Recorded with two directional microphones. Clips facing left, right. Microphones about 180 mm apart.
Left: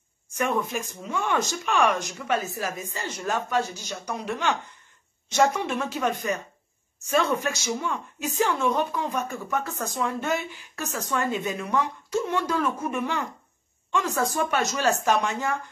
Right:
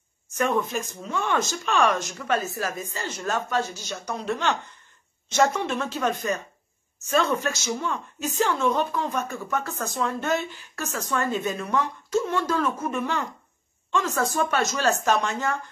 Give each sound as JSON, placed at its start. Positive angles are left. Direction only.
{"t": 0.4, "sound": "speech", "side_deg": 10}